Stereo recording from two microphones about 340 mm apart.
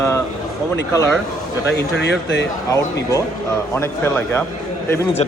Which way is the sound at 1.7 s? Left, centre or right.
Left.